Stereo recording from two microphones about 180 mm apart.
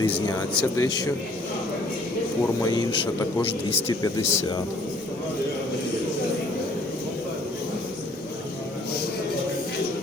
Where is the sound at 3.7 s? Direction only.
15° left (ahead or behind).